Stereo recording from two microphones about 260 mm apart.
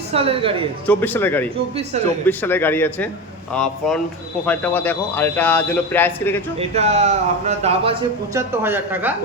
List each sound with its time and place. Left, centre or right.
0.1 s speech: right
0.9 s a man's voice: centre
6.6 s speech: right
8.3 s speech: centre